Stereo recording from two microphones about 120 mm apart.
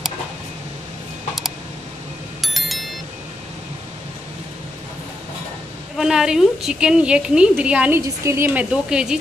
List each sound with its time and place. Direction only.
2.4 s music: centre (ahead or behind)
5.9 s a woman's voice: 5° right (ahead or behind)
8.0 s a woman's voice: 25° right (ahead or behind)
8.5 s speech: 5° right (ahead or behind)